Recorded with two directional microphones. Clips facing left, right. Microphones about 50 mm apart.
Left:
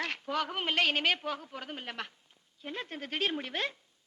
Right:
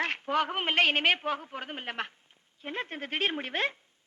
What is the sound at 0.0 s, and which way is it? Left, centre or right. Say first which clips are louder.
A woman's voice: right 5 dB; right.